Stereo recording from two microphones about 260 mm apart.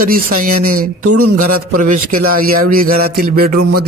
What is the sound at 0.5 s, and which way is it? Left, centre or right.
A man's voice, right.